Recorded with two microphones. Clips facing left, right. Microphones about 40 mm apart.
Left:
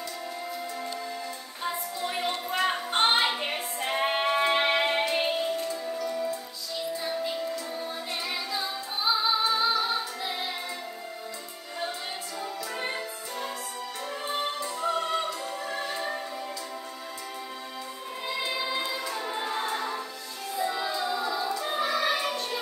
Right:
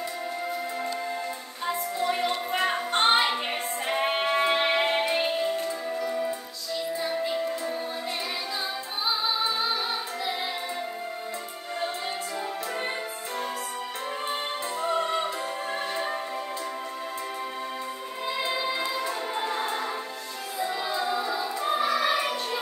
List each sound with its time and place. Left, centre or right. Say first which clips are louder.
2.0 s a sound: right 3 dB; centre
2.6 s music: even; centre
5.0 s music: right 1 dB; right
14.2 s opera: left 2 dB; right
18.5 s music: right 2 dB; centre
19.6 s music: right 1 dB; right
20.5 s music: even; centre
21.6 s choir: right 4 dB; centre